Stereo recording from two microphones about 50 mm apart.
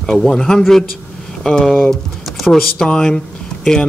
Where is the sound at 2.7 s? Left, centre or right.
Centre.